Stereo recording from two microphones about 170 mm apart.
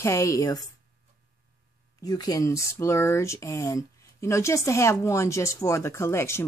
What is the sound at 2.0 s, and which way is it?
Speech, 20° left (ahead or behind).